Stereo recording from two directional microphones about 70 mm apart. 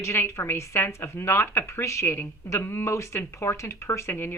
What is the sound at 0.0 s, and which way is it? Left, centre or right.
A woman's voice, left.